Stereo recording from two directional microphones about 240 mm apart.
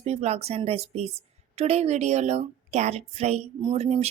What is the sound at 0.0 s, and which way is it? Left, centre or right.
A woman's voice, right.